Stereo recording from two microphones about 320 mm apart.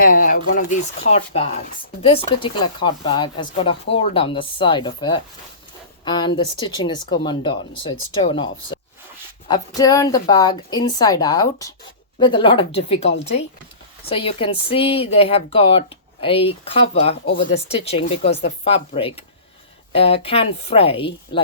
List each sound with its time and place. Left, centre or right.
0.0 s speech: left
13.0 s speech: left
14.1 s speech: centre